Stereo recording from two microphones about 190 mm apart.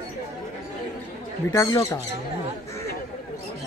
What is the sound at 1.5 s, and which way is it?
Speech, 15° left (ahead or behind).